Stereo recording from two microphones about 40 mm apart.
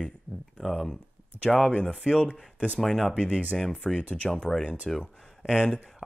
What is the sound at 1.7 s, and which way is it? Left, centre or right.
Speech, left.